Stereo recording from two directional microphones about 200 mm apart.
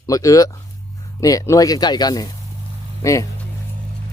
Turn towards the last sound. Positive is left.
turn(degrees=15)  # may be behind; listen again after turning